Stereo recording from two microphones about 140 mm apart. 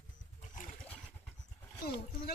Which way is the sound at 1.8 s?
90° left.